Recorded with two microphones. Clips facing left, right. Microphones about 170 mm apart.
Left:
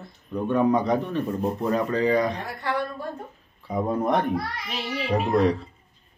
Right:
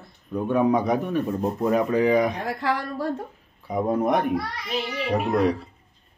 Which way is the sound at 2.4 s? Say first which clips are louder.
Right 2 dB; 90° right.